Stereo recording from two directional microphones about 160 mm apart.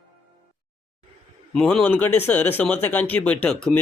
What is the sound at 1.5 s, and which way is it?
Speech, 5° left (ahead or behind).